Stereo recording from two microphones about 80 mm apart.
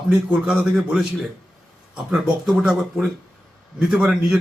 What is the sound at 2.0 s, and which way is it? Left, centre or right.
Speech, centre.